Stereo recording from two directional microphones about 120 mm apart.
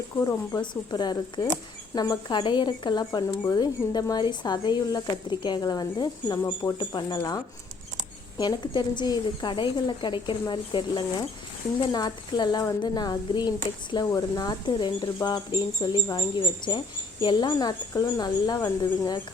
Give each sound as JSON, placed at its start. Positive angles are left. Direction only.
{"t": 0.2, "sound": "speech", "side_deg": 25}
{"t": 0.6, "sound": "speech", "side_deg": 40}
{"t": 6.4, "sound": "speech", "side_deg": 25}
{"t": 6.7, "sound": "speech", "side_deg": 40}